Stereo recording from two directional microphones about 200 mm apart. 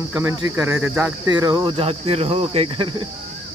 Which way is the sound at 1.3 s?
20° right (ahead or behind).